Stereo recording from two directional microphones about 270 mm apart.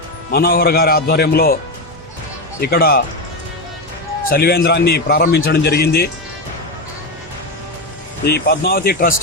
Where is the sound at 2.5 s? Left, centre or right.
Left.